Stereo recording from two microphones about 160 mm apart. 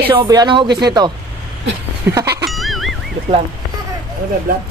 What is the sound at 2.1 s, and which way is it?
Speech, 20° right (ahead or behind).